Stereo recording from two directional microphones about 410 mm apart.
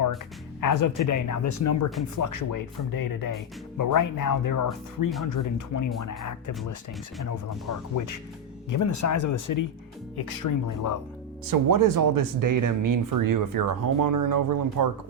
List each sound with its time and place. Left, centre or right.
0.6 s speech: left
7.3 s speech: left
11.4 s speech: right